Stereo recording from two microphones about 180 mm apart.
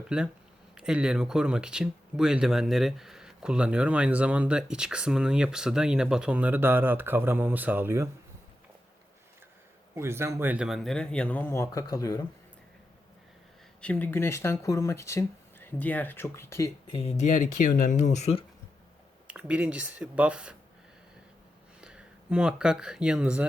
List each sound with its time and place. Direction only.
0.1 s speech: 5° right (ahead or behind)
9.9 s speech: 15° right (ahead or behind); by 12.2 s 20° left (ahead or behind)
13.8 s speech: 10° left (ahead or behind)
17.6 s speech: 45° left (ahead or behind)
19.3 s speech: 5° right (ahead or behind)
21.8 s speech: 5° right (ahead or behind)